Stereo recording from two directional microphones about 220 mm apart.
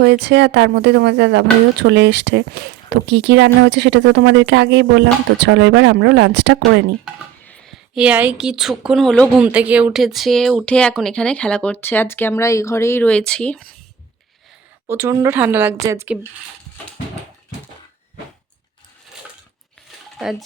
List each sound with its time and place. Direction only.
0.0 s speech: 50° right (ahead or behind)
7.0 s speech: 5° left (ahead or behind)
14.8 s speech: 10° right (ahead or behind)